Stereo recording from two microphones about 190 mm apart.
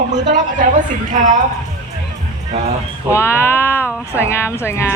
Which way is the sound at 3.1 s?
15° left (ahead or behind).